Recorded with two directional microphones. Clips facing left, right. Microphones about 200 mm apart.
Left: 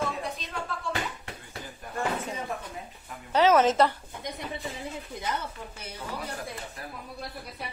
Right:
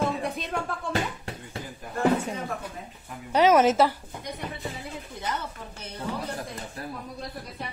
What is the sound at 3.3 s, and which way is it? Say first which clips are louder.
Speech: right 2 dB; 10° right (ahead or behind).